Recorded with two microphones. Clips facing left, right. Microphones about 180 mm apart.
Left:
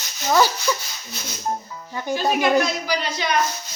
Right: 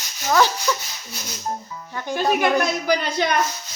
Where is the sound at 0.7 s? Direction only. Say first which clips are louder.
Even; 10° left (ahead or behind).